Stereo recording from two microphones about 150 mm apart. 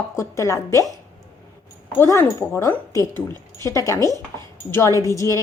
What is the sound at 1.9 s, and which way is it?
Speech, 15° left (ahead or behind).